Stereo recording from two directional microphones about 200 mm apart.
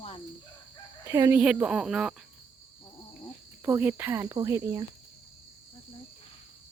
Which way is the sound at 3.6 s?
15° right (ahead or behind).